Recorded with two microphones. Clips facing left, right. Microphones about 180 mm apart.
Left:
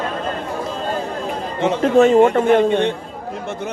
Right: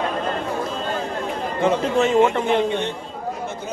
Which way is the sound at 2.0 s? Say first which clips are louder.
Left 7 dB; 45° left (ahead or behind).